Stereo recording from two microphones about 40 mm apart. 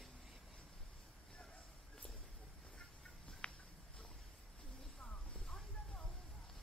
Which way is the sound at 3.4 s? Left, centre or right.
Left.